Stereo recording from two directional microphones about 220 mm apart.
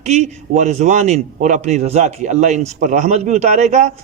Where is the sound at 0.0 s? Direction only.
30° right (ahead or behind).